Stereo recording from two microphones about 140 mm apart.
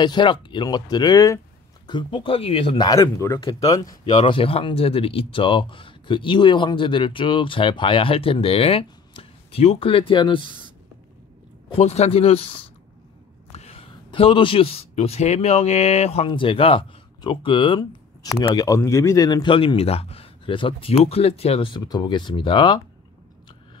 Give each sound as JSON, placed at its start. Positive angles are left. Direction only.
{"t": 0.0, "sound": "speech", "side_deg": 35}
{"t": 2.9, "sound": "speech", "side_deg": 20}
{"t": 4.3, "sound": "speech", "side_deg": 40}
{"t": 11.7, "sound": "a man's voice", "side_deg": 50}
{"t": 16.3, "sound": "speech", "side_deg": 40}